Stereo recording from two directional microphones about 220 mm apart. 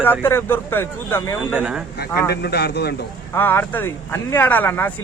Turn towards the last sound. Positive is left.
turn(degrees=10)  # may be behind; listen again after turning